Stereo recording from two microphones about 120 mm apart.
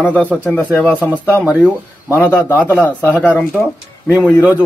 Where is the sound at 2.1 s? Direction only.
15° left (ahead or behind).